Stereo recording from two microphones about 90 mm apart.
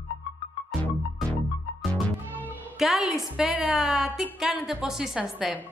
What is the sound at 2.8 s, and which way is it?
A woman's voice, 5° right (ahead or behind).